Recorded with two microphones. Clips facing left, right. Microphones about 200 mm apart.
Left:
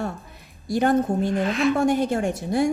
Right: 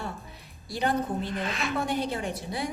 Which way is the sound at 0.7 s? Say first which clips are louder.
Left 8 dB; 50° left (ahead or behind).